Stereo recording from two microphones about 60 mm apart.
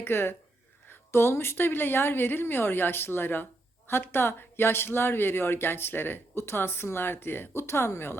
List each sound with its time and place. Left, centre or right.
0.0 s speech: left